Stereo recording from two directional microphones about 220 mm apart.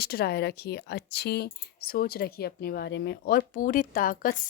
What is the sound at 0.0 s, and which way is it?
Speech, 45° left (ahead or behind).